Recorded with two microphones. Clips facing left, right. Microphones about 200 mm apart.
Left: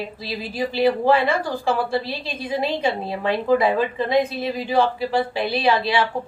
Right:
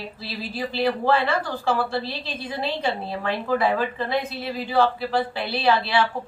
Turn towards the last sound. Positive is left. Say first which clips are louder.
# left 1 dB
turn(degrees=15)  # may be behind; listen again after turning